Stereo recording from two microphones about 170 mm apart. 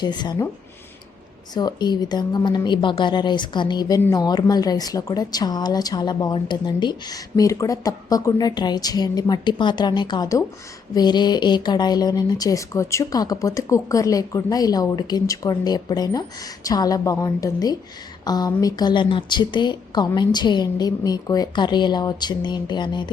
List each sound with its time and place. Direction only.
0.0 s a woman's voice: 25° left (ahead or behind)
1.5 s a woman's voice: 25° left (ahead or behind)